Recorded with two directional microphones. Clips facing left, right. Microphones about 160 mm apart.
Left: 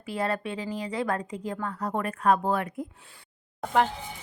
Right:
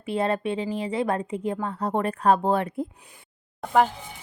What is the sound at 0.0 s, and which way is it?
A woman's voice, 25° right (ahead or behind).